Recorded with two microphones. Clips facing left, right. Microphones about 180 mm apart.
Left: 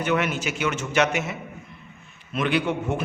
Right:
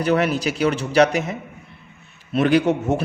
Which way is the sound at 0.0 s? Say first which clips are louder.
Right 5 dB; 35° right (ahead or behind).